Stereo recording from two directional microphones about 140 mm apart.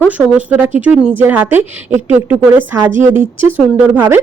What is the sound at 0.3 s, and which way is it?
Speech, 10° right (ahead or behind).